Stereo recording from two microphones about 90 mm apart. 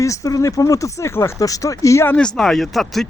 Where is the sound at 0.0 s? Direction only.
35° left (ahead or behind).